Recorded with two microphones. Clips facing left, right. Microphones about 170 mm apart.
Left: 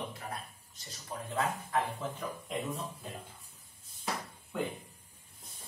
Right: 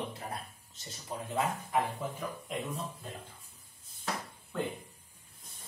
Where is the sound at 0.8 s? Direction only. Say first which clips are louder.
Right 2 dB; 15° right (ahead or behind).